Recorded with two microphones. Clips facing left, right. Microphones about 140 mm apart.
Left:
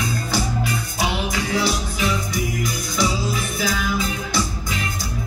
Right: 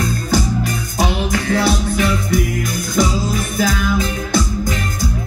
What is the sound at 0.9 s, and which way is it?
Music, 55° right (ahead or behind).